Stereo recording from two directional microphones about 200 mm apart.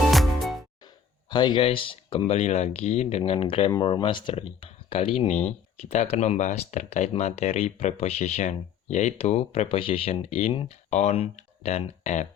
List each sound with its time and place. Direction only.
0.1 s music: centre (ahead or behind)
1.3 s speech: 20° left (ahead or behind)